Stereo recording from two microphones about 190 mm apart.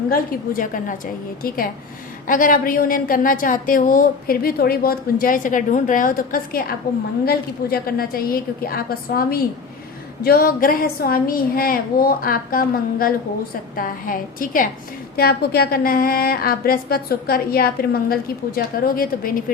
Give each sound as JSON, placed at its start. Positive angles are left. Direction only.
{"t": 0.1, "sound": "a woman's voice", "side_deg": 45}